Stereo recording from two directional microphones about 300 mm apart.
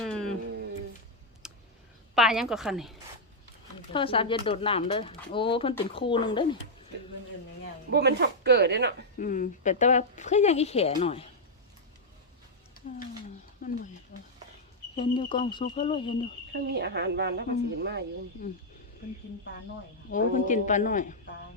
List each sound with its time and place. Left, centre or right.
0.0 s a sound: centre
1.4 s clicking: centre
2.1 s a woman's voice: centre
3.9 s speech: centre
7.9 s speech: right
9.1 s a woman's voice: left
14.1 s a sound: left
14.9 s speech: centre
16.5 s speech: right
18.4 s a woman's voice: left
20.1 s a woman's voice: left